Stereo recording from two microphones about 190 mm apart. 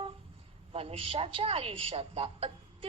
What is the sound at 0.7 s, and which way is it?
A woman's voice, 30° right (ahead or behind).